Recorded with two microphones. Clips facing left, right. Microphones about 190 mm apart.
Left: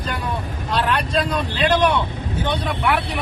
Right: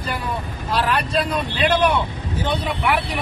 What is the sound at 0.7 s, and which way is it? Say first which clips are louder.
Speech: even; 5° right (ahead or behind).